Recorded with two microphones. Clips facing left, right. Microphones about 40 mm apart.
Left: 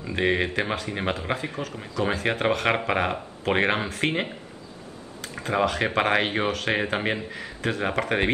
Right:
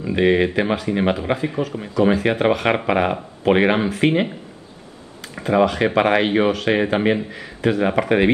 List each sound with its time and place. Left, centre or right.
0.0 s speech: centre